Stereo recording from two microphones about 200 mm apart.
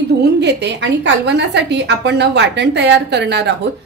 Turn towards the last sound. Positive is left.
turn(degrees=-60)  # may be behind; listen again after turning